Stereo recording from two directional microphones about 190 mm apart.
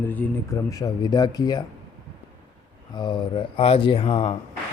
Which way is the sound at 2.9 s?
25° left (ahead or behind).